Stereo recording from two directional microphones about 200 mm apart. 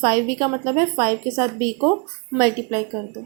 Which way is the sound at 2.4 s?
20° right (ahead or behind).